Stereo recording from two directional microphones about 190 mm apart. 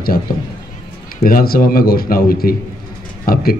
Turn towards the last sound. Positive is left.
turn(degrees=50)  # may be behind; listen again after turning